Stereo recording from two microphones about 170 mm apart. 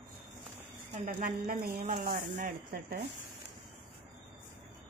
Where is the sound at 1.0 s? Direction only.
50° right (ahead or behind).